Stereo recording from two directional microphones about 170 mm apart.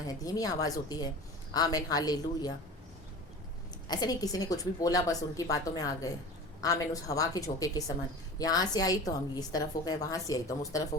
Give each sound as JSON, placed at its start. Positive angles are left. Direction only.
{"t": 0.1, "sound": "a woman's voice", "side_deg": 20}
{"t": 3.8, "sound": "a woman's voice", "side_deg": 25}